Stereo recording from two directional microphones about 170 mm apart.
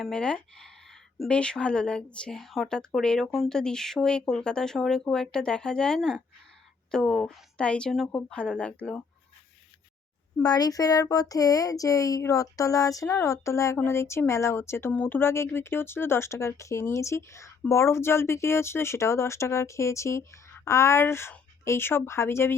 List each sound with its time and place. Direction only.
0.0 s a woman's voice: 5° left (ahead or behind)
10.4 s speech: 20° left (ahead or behind)